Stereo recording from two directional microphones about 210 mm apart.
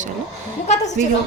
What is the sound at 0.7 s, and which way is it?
Speech, 35° left (ahead or behind).